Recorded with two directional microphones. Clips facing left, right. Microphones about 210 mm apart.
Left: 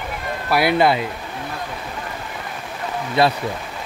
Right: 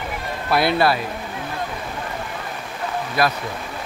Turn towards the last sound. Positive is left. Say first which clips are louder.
# left 3 dB
turn(degrees=25)  # may be behind; listen again after turning